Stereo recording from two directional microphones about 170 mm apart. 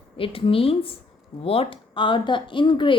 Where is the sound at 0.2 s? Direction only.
35° left (ahead or behind).